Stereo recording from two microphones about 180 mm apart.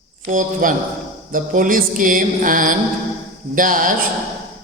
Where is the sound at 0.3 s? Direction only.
45° right (ahead or behind).